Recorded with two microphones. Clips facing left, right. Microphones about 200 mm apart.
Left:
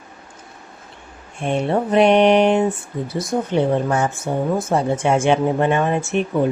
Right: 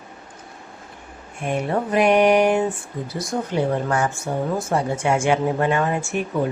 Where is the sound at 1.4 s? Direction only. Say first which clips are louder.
Left 3 dB; 30° left (ahead or behind).